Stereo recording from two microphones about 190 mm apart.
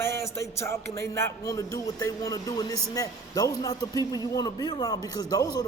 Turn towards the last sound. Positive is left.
turn(degrees=20)  # may be behind; listen again after turning